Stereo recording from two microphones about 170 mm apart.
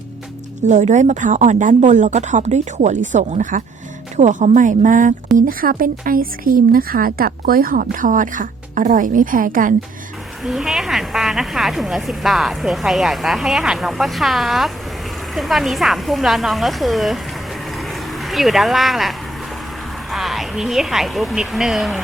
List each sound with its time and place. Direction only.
0.7 s speech: 45° right (ahead or behind)
10.4 s a woman's voice: centre (ahead or behind)
17.7 s vehicle: centre (ahead or behind)
20.1 s a woman's voice: centre (ahead or behind)